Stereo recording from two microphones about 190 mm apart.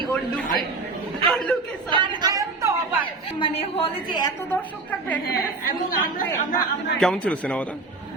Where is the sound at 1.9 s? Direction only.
25° right (ahead or behind).